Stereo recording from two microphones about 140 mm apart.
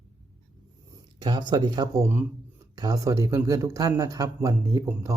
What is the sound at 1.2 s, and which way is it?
A man's voice, 35° right (ahead or behind).